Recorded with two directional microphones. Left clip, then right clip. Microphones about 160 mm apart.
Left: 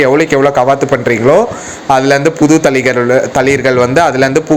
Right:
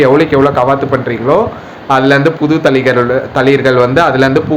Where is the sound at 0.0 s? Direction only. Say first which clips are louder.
Right 1 dB; 35° left (ahead or behind).